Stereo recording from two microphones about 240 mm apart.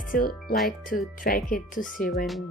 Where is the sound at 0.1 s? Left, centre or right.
Left.